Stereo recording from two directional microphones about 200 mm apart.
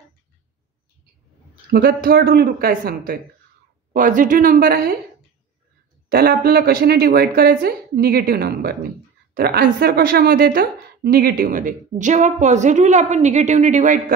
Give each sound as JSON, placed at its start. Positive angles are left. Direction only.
{"t": 1.7, "sound": "a woman's voice", "side_deg": -50}
{"t": 6.0, "sound": "a woman's voice", "side_deg": -50}